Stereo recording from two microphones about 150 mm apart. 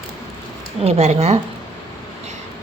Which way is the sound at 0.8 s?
45° right (ahead or behind).